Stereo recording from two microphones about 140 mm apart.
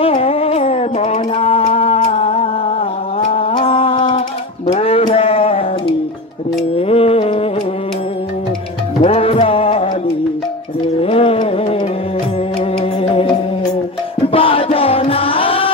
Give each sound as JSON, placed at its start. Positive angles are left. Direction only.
{"t": 0.0, "sound": "music", "side_deg": 45}
{"t": 3.2, "sound": "mantra", "side_deg": 40}
{"t": 4.6, "sound": "music", "side_deg": 45}
{"t": 9.0, "sound": "music", "side_deg": 45}
{"t": 11.0, "sound": "music", "side_deg": 45}
{"t": 13.0, "sound": "music", "side_deg": 40}